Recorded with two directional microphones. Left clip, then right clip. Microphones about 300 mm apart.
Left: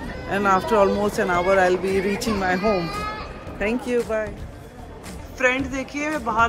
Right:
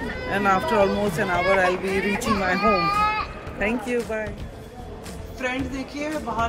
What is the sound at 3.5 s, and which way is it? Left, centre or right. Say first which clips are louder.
Speech: left 2 dB; centre.